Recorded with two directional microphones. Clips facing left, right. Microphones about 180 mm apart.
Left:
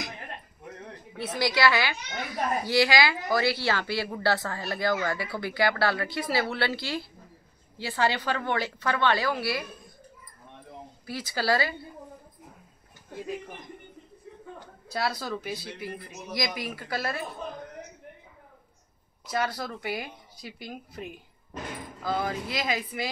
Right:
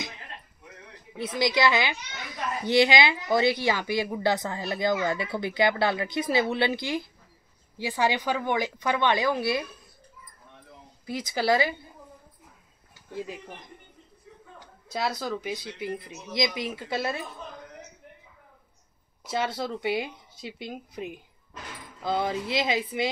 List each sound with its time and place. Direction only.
1.1 s speech: 15° right (ahead or behind)
2.0 s a child's voice: 50° left (ahead or behind)
2.6 s a woman's voice: 20° right (ahead or behind)
11.1 s speech: 20° right (ahead or behind)
14.9 s a woman's voice: 20° right (ahead or behind)
19.2 s speech: 25° right (ahead or behind)